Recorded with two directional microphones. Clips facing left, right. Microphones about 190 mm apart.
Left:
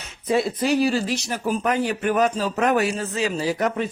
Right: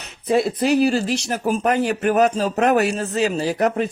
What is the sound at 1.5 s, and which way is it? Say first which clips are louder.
Speech: right 3 dB; 45° right (ahead or behind).